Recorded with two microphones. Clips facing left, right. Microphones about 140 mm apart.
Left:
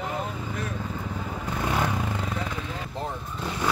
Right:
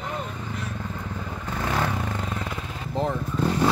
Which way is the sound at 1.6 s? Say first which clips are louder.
Even; 15° left (ahead or behind).